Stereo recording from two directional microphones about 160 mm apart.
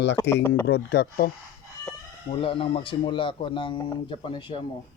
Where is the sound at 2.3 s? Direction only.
35° left (ahead or behind).